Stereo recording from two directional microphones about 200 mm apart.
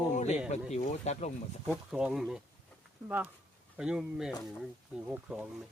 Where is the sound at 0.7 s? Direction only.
35° left (ahead or behind).